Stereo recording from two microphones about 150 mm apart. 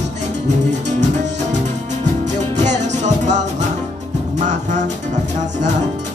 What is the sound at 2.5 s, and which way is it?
Music, 50° right (ahead or behind).